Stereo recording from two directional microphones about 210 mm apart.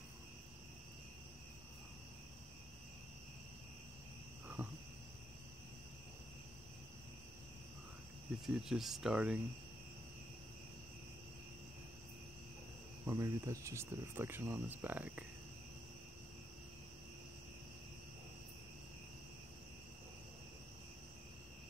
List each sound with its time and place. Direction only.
4.6 s wild animals: 10° right (ahead or behind)
8.5 s speech: 5° right (ahead or behind)
13.0 s speech: 15° right (ahead or behind)